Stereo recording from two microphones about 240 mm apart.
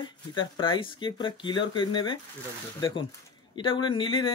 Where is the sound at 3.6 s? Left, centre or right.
Centre.